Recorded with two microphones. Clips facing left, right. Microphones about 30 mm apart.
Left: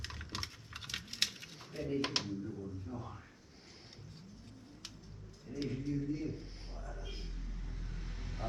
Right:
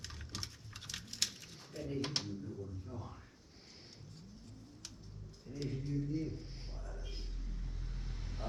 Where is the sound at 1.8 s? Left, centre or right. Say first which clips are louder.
Left 3 dB; left.